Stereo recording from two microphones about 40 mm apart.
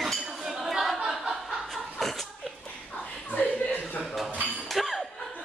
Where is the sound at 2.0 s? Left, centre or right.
Centre.